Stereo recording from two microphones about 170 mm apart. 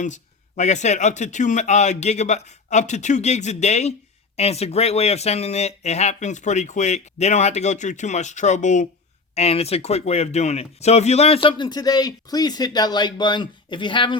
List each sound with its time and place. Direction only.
0.0 s speech: 45° left (ahead or behind); by 14.2 s 30° left (ahead or behind)